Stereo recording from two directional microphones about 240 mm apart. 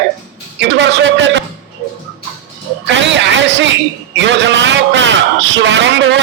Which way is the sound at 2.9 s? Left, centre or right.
Right.